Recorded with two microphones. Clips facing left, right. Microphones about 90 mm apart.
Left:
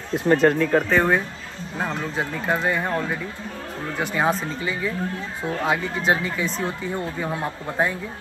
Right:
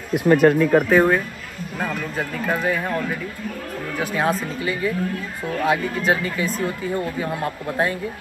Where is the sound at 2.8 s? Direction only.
25° left (ahead or behind).